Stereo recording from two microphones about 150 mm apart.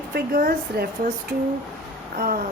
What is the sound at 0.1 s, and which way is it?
Speech, 75° right (ahead or behind).